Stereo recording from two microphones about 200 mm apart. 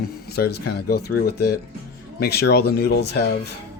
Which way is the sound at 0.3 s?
55° left (ahead or behind).